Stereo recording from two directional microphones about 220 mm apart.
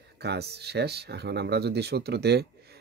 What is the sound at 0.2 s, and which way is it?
Speech, 50° right (ahead or behind).